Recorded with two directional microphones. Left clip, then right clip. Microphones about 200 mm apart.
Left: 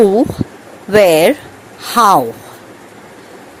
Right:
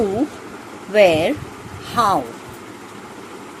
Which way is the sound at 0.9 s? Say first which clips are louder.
Left 5 dB; 50° left (ahead or behind).